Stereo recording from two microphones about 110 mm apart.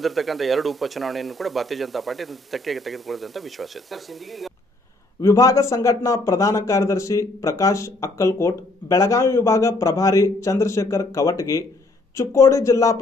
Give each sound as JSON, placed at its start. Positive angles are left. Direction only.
{"t": 0.0, "sound": "speech", "side_deg": 0}
{"t": 5.2, "sound": "speech", "side_deg": 30}